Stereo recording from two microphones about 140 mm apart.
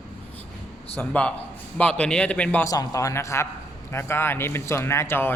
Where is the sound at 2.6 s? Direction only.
25° left (ahead or behind).